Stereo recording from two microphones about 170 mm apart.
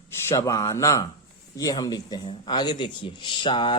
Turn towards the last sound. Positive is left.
turn(degrees=30)  # may be behind; listen again after turning